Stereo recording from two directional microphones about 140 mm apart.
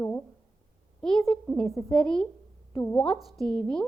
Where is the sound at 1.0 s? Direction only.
Centre (ahead or behind).